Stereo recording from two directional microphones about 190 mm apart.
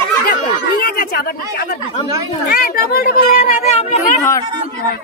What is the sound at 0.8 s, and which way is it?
Speech, 55° left (ahead or behind).